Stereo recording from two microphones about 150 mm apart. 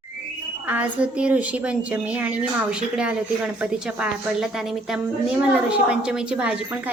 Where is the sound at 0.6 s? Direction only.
10° right (ahead or behind).